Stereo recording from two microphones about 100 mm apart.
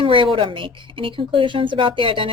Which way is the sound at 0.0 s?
60° right (ahead or behind).